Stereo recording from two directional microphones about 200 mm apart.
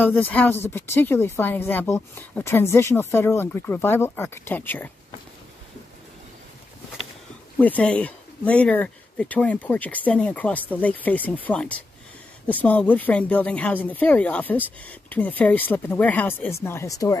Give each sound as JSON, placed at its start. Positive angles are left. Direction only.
{"t": 0.0, "sound": "speech", "side_deg": 10}
{"t": 7.5, "sound": "speech", "side_deg": 10}